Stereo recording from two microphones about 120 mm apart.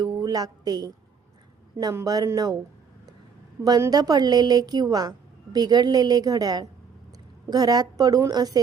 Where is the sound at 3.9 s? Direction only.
35° right (ahead or behind).